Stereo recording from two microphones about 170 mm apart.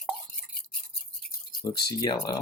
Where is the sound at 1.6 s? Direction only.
20° left (ahead or behind).